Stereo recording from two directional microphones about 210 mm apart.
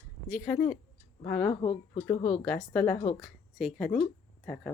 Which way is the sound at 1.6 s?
25° left (ahead or behind).